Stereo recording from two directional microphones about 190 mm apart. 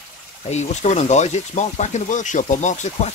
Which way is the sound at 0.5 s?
35° left (ahead or behind).